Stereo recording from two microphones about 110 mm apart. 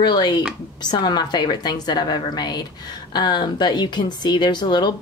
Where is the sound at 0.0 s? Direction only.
40° left (ahead or behind).